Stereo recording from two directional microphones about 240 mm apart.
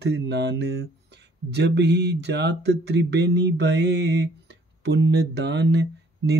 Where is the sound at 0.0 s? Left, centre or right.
Right.